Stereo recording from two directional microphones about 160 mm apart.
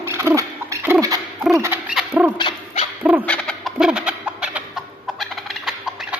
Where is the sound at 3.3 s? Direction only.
Centre (ahead or behind).